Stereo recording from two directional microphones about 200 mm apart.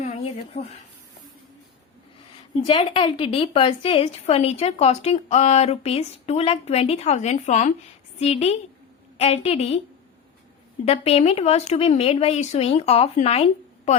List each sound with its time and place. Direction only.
0.0 s a sound: 35° left (ahead or behind)
2.6 s a woman's voice: 25° left (ahead or behind)
10.8 s a woman's voice: 30° left (ahead or behind)